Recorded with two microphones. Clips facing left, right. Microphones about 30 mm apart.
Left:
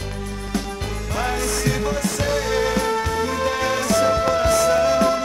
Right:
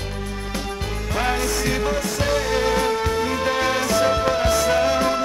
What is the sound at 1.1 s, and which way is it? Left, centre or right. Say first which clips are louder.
Music: right 1 dB; centre.